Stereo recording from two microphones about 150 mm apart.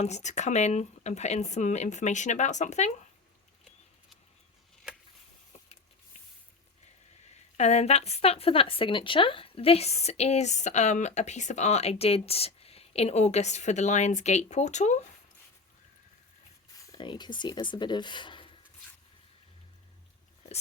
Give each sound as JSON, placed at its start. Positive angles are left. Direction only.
{"t": 0.0, "sound": "speech", "side_deg": 50}
{"t": 7.5, "sound": "speech", "side_deg": 45}
{"t": 16.8, "sound": "speech", "side_deg": 25}